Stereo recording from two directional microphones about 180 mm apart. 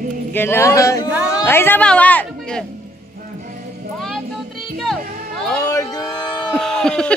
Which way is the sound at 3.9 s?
Centre (ahead or behind).